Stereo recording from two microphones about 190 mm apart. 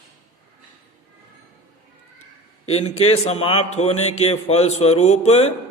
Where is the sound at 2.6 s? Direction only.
30° left (ahead or behind).